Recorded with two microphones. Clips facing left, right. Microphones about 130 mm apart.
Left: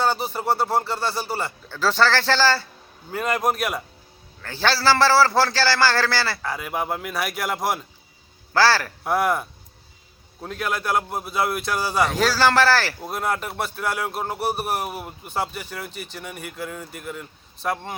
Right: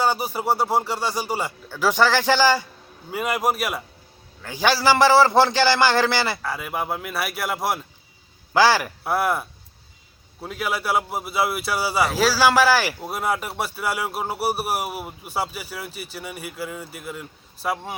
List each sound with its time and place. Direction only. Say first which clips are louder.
0.0 s a man's voice: right 1 dB; 10° right (ahead or behind)
6.4 s speech: even; centre (ahead or behind)
8.5 s a man's voice: right 1 dB; 15° right (ahead or behind)
9.0 s a man's voice: left 2 dB; 5° right (ahead or behind)